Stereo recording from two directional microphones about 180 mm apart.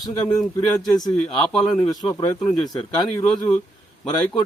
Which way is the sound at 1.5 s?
5° left (ahead or behind).